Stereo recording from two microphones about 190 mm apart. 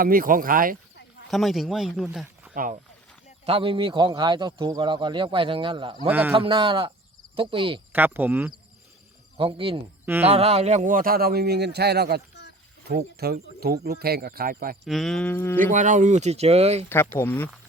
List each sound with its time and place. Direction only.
0.0 s a man's voice: 50° right (ahead or behind)
1.3 s speech: centre (ahead or behind)
3.4 s a man's voice: 30° right (ahead or behind)
6.1 s speech: 10° right (ahead or behind)
6.3 s a man's voice: 30° right (ahead or behind)
7.9 s speech: 10° right (ahead or behind)
9.4 s a man's voice: 30° right (ahead or behind); by 14.8 s 50° right (ahead or behind)
14.8 s speech: centre (ahead or behind)
15.5 s speech: 40° right (ahead or behind)
16.9 s speech: 10° left (ahead or behind)